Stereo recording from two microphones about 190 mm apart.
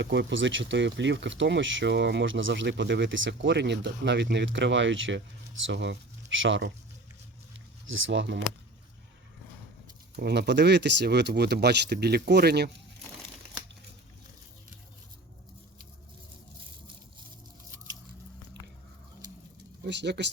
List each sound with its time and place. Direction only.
0.0 s speech: 70° right (ahead or behind)
5.6 s speech: 65° right (ahead or behind)
7.9 s speech: 85° right
10.2 s speech: 60° right (ahead or behind)
19.8 s speech: 65° right (ahead or behind)